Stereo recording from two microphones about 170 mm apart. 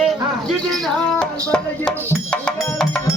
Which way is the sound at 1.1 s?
5° left (ahead or behind).